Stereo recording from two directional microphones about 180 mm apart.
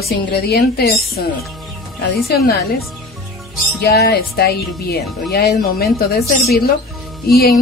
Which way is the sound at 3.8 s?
60° left (ahead or behind).